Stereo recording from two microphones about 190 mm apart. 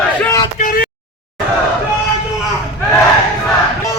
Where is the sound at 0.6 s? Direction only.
45° left (ahead or behind).